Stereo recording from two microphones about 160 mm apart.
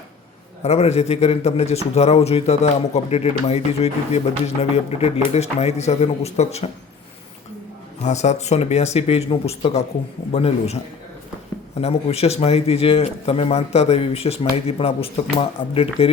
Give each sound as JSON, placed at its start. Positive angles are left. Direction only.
{"t": 0.6, "sound": "a man's voice", "side_deg": 40}
{"t": 8.0, "sound": "a man's voice", "side_deg": 45}
{"t": 11.8, "sound": "a man's voice", "side_deg": 40}